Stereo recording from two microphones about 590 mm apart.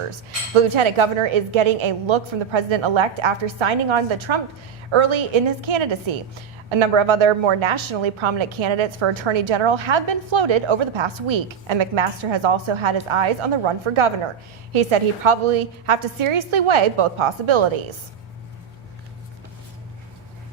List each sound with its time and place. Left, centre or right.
0.5 s a woman's voice: right